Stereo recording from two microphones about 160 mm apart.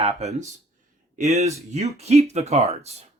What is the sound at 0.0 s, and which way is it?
Speech, 45° right (ahead or behind).